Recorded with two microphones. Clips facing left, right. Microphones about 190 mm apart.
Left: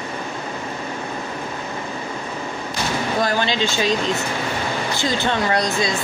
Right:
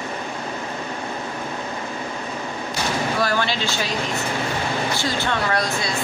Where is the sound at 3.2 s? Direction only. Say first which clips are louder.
Left 4 dB; 20° left (ahead or behind).